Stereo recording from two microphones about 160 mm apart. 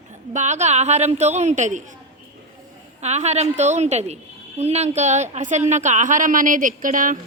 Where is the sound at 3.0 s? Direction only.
45° right (ahead or behind).